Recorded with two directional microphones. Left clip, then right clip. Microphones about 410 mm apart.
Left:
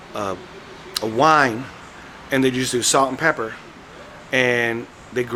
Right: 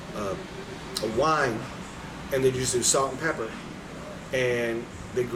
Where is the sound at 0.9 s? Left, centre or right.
Left.